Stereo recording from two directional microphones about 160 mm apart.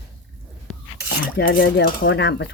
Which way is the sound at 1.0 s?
75° left (ahead or behind).